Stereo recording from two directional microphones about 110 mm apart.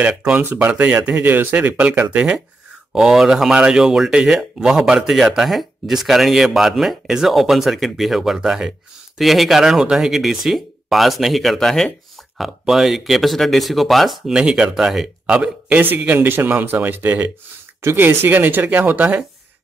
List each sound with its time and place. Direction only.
0.0 s speech: 10° right (ahead or behind)
0.7 s speech: 10° right (ahead or behind)